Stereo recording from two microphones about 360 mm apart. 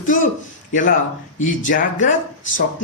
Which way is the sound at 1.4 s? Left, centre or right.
Left.